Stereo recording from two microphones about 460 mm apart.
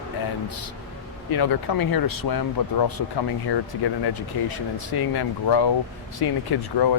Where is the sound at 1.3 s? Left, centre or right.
Left.